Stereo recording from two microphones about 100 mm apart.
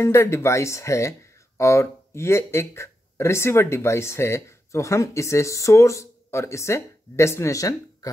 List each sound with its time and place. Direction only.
0.0 s speech: 25° left (ahead or behind)